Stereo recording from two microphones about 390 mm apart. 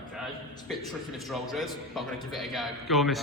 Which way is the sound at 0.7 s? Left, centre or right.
Centre.